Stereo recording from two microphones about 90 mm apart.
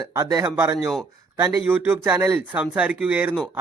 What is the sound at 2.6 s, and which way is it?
Speech, 15° right (ahead or behind).